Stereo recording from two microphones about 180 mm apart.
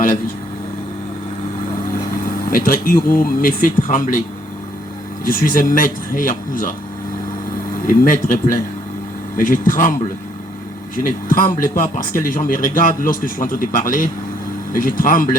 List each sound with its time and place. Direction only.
2.5 s a man's voice: 50° left (ahead or behind)
5.2 s a man's voice: 50° left (ahead or behind)
7.9 s a man's voice: 50° left (ahead or behind)
9.4 s a man's voice: 50° left (ahead or behind)
10.9 s a man's voice: 50° left (ahead or behind)